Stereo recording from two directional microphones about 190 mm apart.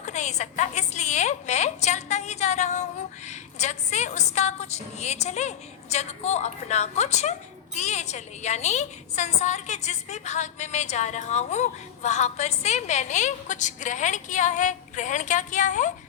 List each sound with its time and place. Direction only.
0.0 s a woman's voice: 40° left (ahead or behind)